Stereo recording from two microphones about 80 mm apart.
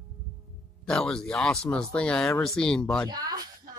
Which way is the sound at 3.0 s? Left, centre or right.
Right.